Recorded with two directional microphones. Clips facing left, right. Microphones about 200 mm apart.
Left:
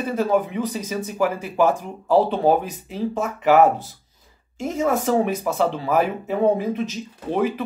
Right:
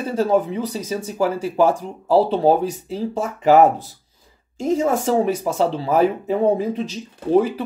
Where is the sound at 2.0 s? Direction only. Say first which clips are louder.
Right 2 dB; 35° right (ahead or behind).